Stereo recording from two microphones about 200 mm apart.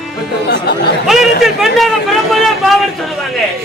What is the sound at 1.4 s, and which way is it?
A man's voice, centre (ahead or behind).